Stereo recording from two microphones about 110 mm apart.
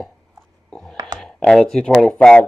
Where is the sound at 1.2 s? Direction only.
5° left (ahead or behind).